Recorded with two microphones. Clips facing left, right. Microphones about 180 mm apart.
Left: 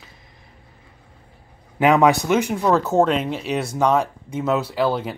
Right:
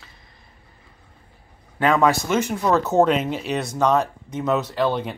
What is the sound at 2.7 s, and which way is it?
Speech, centre (ahead or behind).